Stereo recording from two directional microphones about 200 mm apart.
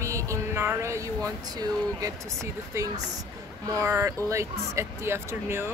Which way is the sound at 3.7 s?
15° right (ahead or behind).